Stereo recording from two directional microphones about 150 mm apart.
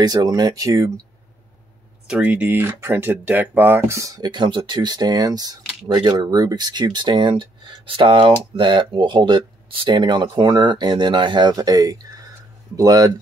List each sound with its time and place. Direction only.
0.0 s speech: 25° right (ahead or behind)
2.0 s speech: 5° right (ahead or behind); by 13.1 s 25° right (ahead or behind)